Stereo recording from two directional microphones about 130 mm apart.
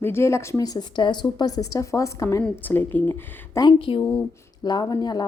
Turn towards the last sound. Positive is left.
turn(degrees=30)  # may be behind; listen again after turning